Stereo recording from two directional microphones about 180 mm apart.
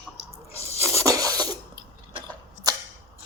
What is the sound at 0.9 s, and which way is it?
Filing, 20° right (ahead or behind).